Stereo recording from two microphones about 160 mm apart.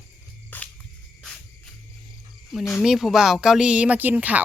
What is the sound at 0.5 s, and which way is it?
Music, 10° left (ahead or behind).